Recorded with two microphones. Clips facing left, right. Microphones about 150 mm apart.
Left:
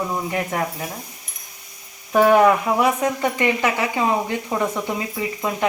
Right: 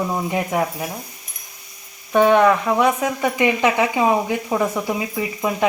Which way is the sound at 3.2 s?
15° right (ahead or behind).